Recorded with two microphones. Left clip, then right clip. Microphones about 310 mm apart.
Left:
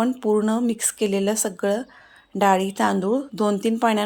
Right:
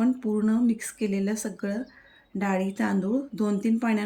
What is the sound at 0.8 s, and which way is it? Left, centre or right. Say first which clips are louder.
Speech: left 8 dB; left.